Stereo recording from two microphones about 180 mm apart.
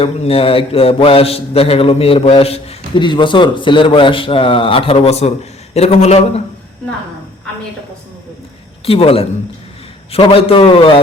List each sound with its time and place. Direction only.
0.0 s mantra: 30° left (ahead or behind)
8.9 s mantra: 30° left (ahead or behind)